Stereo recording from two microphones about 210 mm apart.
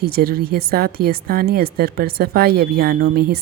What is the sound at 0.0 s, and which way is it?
A woman's voice, 45° right (ahead or behind).